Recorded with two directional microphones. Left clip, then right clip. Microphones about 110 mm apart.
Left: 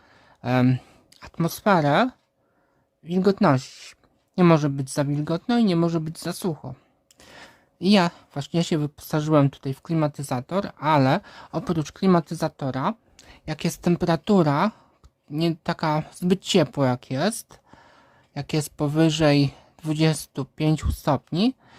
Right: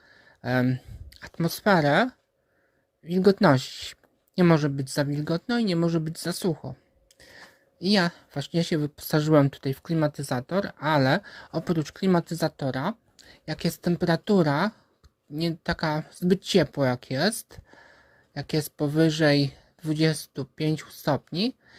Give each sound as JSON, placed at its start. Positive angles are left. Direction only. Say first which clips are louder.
{"t": 0.1, "sound": "a sound", "louder": "left 3 dB", "side_deg": 15}
{"t": 0.6, "sound": "speech", "louder": "left 4 dB", "side_deg": 40}
{"t": 1.1, "sound": "speech", "louder": "left 2 dB", "side_deg": 10}
{"t": 3.4, "sound": "speech", "louder": "even", "side_deg": -5}
{"t": 4.5, "sound": "speech", "louder": "left 2 dB", "side_deg": 10}
{"t": 7.2, "sound": "a sound", "louder": "left 3 dB", "side_deg": 30}
{"t": 8.1, "sound": "speech", "louder": "left 2 dB", "side_deg": 5}
{"t": 8.6, "sound": "speech", "louder": "left 2 dB", "side_deg": 20}
{"t": 9.0, "sound": "speech", "louder": "even", "side_deg": 0}
{"t": 13.1, "sound": "a sound", "louder": "left 2 dB", "side_deg": 25}
{"t": 14.0, "sound": "speech", "louder": "left 1 dB", "side_deg": 15}